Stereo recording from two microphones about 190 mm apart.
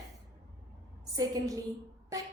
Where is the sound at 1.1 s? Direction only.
20° right (ahead or behind).